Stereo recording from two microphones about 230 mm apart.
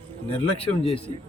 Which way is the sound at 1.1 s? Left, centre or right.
Right.